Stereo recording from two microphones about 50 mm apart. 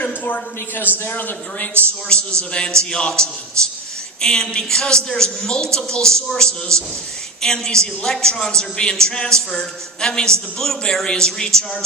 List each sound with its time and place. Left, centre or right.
1.0 s a man's voice: left
2.1 s a man's voice: left